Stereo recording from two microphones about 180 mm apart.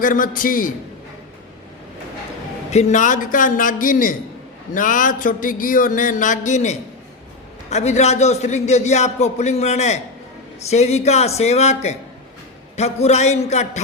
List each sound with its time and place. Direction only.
0.0 s speech: 50° left (ahead or behind)
2.7 s a man's voice: 45° left (ahead or behind)